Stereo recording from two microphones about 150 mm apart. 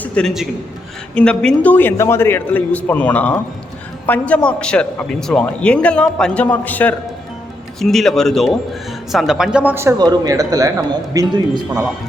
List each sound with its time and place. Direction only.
0.0 s a man's voice: 5° left (ahead or behind); by 11.9 s 20° right (ahead or behind)